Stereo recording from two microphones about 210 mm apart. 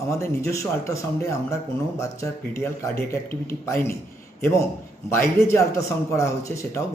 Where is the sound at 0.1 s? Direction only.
15° left (ahead or behind).